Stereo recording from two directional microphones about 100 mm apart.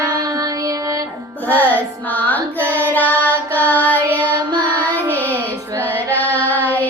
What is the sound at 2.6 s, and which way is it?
Child singing, 25° right (ahead or behind).